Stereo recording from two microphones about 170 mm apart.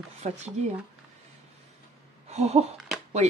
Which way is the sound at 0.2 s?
40° right (ahead or behind).